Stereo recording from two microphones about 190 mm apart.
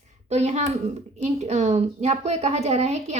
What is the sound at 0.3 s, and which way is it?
A woman's voice, 35° right (ahead or behind).